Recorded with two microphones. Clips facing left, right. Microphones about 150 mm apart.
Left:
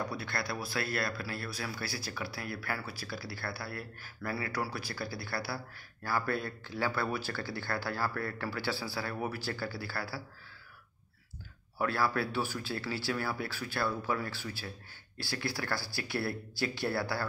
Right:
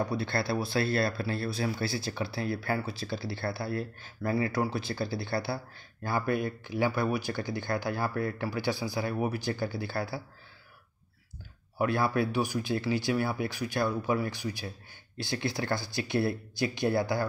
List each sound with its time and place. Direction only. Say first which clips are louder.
0.0 s speech: right 6 dB; 25° right (ahead or behind)
11.8 s speech: right 4 dB; 20° right (ahead or behind)